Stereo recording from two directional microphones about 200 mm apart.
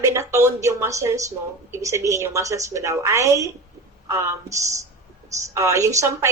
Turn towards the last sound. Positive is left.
turn(degrees=-15)  # may be behind; listen again after turning